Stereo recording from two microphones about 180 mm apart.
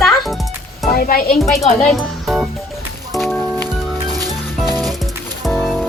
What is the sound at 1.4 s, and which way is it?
A child's voice, centre (ahead or behind).